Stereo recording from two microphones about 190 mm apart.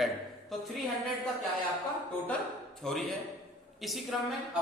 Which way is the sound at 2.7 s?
Centre (ahead or behind).